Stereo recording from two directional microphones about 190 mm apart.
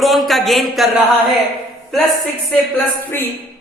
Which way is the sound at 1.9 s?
Centre (ahead or behind).